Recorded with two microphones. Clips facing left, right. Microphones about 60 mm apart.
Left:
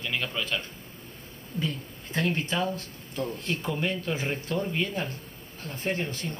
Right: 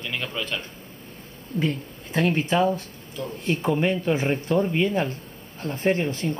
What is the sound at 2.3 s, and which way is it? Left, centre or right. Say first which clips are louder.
A man's voice: right 7 dB; right.